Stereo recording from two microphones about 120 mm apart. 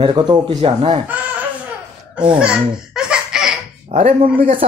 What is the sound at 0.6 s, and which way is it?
Speech, 55° right (ahead or behind).